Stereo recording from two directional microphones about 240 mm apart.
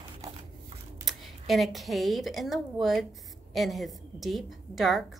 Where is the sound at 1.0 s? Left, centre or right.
Centre.